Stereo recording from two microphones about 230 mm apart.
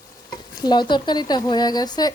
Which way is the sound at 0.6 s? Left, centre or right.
Centre.